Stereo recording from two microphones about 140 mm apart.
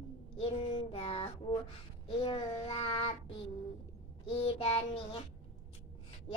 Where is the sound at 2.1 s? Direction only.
40° left (ahead or behind).